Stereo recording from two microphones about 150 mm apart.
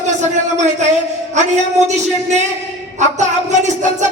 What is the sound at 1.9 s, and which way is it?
Music, 50° right (ahead or behind).